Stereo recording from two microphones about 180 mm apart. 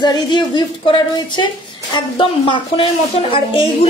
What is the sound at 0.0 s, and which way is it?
A woman's voice, 25° left (ahead or behind).